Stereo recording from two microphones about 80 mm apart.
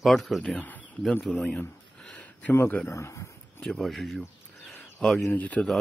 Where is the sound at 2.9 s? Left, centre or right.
Left.